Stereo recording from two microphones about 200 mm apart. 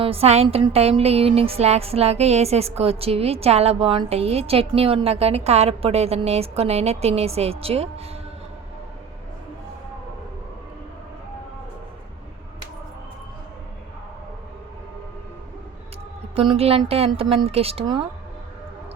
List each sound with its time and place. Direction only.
0.0 s music: 30° right (ahead or behind)
7.6 s a woman's voice: 30° right (ahead or behind)
16.3 s a woman's voice: 30° right (ahead or behind)